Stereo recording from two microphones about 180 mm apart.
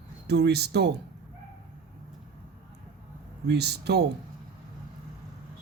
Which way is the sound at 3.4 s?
65° right (ahead or behind).